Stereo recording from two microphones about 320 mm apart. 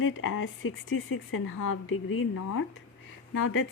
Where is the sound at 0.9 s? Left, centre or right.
Left.